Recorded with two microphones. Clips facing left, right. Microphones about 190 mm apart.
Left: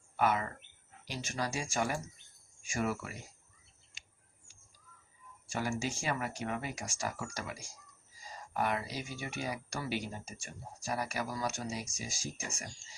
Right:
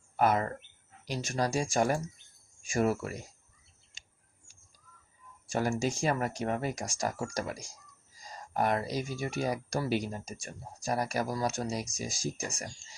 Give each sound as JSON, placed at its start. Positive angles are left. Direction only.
{"t": 0.2, "sound": "speech", "side_deg": -40}
{"t": 5.5, "sound": "speech", "side_deg": -40}